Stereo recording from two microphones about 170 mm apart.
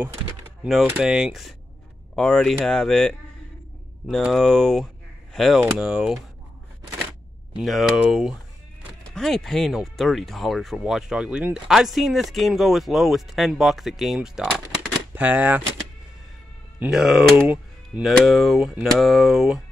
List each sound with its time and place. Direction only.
0.7 s speech: 5° right (ahead or behind)
4.3 s speech: 5° left (ahead or behind)
7.5 s speech: 5° right (ahead or behind)
16.8 s speech: centre (ahead or behind)